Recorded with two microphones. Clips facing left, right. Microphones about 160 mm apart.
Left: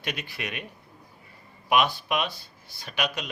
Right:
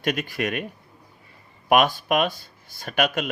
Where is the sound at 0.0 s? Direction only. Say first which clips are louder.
Right 9 dB; 45° right (ahead or behind).